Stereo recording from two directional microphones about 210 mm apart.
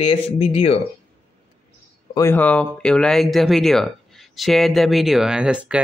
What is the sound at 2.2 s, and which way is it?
Speech, 10° left (ahead or behind).